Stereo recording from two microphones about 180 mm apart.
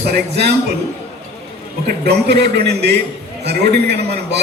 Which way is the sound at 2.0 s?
65° right (ahead or behind).